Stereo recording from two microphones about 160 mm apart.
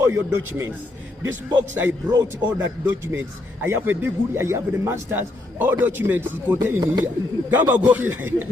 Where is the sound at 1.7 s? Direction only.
15° right (ahead or behind).